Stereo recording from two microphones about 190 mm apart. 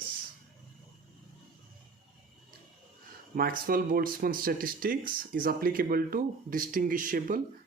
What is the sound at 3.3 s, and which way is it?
Speech, 50° right (ahead or behind).